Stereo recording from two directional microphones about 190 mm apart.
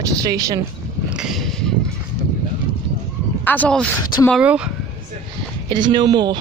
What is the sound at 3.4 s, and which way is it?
Speech, 10° left (ahead or behind).